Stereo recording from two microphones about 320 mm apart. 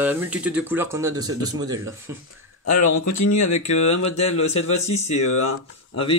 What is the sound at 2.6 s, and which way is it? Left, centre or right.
Speech, left.